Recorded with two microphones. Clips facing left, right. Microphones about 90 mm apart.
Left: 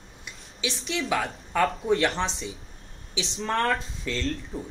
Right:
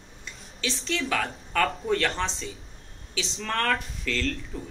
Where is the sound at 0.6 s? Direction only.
15° left (ahead or behind).